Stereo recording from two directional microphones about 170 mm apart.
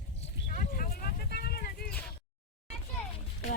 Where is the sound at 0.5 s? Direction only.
55° left (ahead or behind).